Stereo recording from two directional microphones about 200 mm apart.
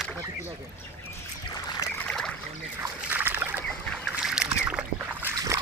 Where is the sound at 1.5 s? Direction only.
15° left (ahead or behind).